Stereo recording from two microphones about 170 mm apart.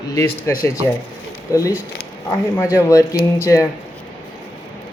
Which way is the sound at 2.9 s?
15° left (ahead or behind).